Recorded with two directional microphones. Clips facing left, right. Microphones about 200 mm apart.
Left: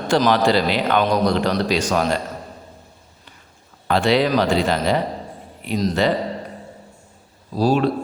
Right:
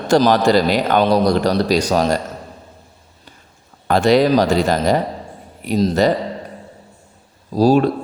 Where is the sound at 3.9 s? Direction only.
45° right (ahead or behind).